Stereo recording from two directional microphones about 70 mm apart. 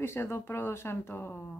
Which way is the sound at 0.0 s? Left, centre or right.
Left.